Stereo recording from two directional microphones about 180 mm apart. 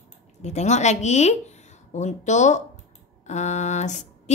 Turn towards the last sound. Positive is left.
turn(degrees=40)  # may be behind; listen again after turning